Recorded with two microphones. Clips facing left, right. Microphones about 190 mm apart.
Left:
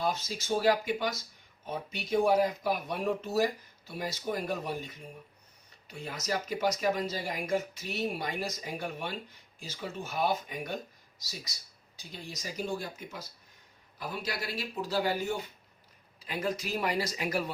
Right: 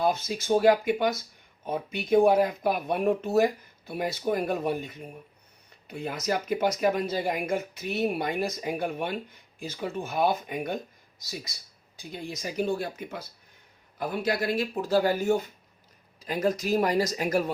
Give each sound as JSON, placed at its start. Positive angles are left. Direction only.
{"t": 0.0, "sound": "speech", "side_deg": -55}